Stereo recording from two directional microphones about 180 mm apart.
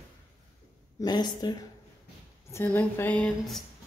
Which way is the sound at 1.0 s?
25° left (ahead or behind).